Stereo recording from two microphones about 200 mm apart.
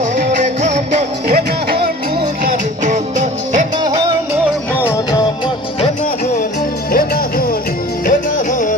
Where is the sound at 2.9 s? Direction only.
40° right (ahead or behind).